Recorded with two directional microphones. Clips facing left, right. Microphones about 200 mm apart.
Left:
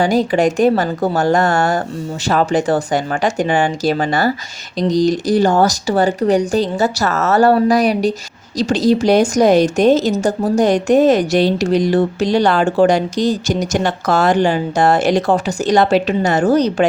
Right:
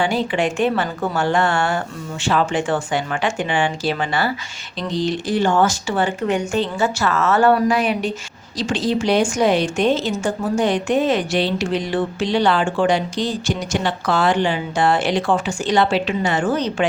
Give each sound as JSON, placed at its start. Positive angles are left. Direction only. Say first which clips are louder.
{"t": 0.0, "sound": "a woman's voice", "louder": "left 6 dB", "side_deg": 40}